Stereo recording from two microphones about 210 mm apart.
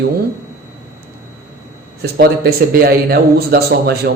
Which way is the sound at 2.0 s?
45° right (ahead or behind).